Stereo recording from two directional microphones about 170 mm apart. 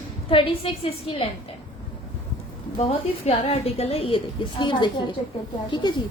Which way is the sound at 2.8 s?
35° left (ahead or behind).